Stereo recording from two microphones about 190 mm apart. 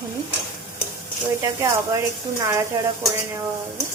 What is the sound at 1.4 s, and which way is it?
Speech, 15° right (ahead or behind).